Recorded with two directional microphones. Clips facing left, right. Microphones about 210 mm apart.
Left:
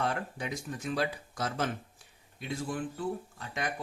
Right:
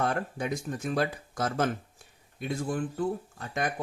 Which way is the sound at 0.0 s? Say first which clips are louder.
Right 4 dB; 50° right (ahead or behind).